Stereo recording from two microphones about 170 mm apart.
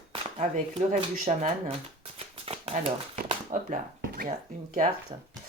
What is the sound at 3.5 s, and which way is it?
Speech, 45° right (ahead or behind).